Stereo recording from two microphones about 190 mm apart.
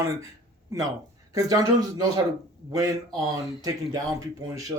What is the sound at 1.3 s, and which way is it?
Speech, 20° right (ahead or behind).